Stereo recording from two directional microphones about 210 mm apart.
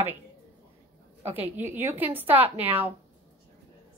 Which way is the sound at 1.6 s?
10° right (ahead or behind).